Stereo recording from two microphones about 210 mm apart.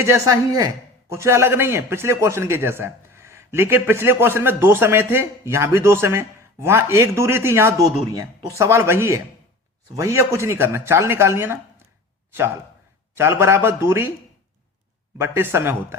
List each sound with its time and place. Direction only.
0.0 s speech: 15° right (ahead or behind)
13.1 s speech: 10° right (ahead or behind)
15.2 s speech: 10° right (ahead or behind)